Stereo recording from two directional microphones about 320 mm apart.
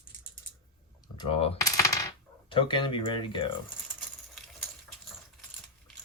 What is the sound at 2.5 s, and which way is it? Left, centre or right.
Speech, centre.